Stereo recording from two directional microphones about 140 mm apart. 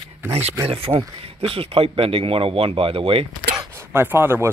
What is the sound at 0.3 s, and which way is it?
Speech, 50° right (ahead or behind).